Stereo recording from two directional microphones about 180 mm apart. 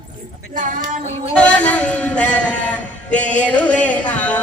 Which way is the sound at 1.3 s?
5° left (ahead or behind).